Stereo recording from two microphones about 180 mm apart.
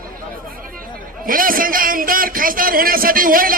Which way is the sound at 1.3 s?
50° right (ahead or behind).